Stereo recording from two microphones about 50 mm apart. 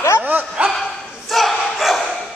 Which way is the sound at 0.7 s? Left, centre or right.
Centre.